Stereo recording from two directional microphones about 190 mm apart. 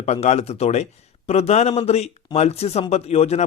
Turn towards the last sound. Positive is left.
turn(degrees=35)  # may be behind; listen again after turning